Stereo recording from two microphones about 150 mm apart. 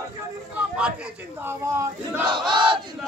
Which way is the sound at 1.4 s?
15° right (ahead or behind).